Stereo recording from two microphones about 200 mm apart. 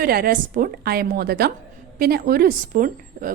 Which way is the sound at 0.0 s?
45° right (ahead or behind).